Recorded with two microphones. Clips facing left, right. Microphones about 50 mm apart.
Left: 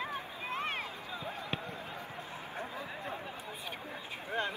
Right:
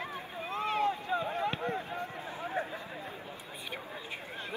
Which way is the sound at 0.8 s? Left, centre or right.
Right.